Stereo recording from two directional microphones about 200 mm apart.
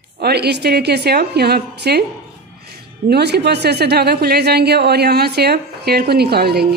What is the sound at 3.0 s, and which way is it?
Speech, 55° right (ahead or behind).